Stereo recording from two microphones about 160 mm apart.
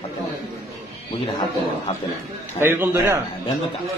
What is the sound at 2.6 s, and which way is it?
Speech, 15° right (ahead or behind).